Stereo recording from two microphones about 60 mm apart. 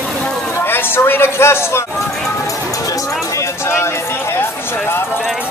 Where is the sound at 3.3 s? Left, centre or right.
Left.